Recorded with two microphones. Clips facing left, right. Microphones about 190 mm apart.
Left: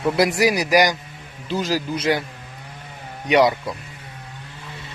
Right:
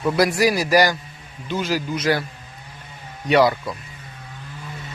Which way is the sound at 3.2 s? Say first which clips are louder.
Even; 15° left (ahead or behind).